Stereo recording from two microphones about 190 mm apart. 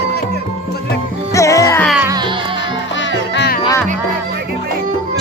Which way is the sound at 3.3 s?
60° left (ahead or behind).